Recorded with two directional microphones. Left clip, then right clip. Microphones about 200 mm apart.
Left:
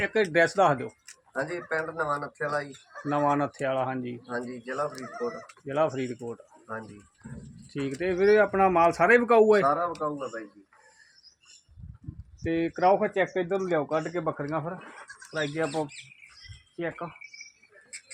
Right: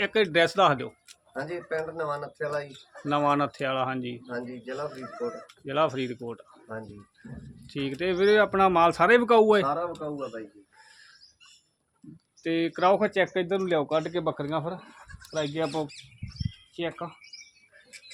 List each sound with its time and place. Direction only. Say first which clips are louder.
0.0 s speech: even; 5° right (ahead or behind)
12.4 s speech: right 1 dB; centre (ahead or behind)
16.7 s speech: right 1 dB; 5° right (ahead or behind)